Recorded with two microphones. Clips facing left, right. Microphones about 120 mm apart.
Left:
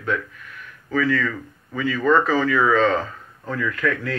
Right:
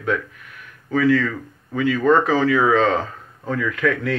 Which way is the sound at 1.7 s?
60° right (ahead or behind).